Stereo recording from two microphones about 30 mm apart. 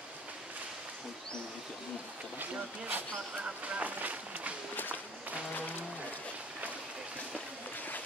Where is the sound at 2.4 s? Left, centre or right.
Right.